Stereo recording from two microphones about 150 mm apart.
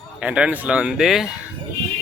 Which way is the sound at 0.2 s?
5° right (ahead or behind).